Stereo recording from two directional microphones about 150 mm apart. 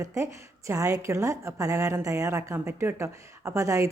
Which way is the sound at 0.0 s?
20° right (ahead or behind).